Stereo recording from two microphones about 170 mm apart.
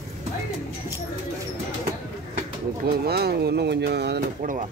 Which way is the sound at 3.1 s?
70° right (ahead or behind).